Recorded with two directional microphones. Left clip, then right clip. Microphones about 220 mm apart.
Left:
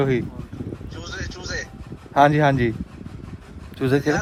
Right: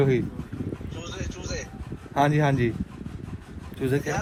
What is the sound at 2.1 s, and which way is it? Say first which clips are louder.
Speech: left 7 dB; 35° left (ahead or behind).